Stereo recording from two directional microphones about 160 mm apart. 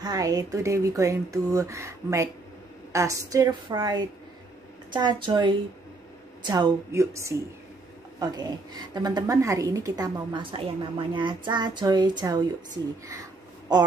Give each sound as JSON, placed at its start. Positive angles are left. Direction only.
{"t": 0.0, "sound": "a woman's voice", "side_deg": -25}